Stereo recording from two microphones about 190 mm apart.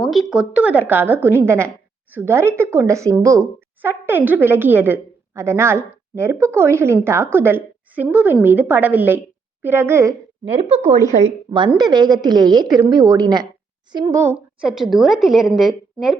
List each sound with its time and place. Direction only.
0.0 s speech: centre (ahead or behind)
10.4 s a woman's voice: 30° right (ahead or behind)
11.7 s a woman's voice: 20° right (ahead or behind); by 16.1 s centre (ahead or behind)